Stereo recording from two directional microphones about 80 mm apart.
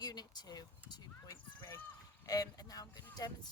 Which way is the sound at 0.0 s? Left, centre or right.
Left.